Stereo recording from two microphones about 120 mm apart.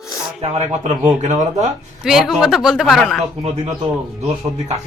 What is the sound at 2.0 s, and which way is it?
A woman's voice, centre (ahead or behind).